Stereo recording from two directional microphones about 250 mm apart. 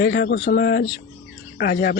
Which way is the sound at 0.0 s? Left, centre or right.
Left.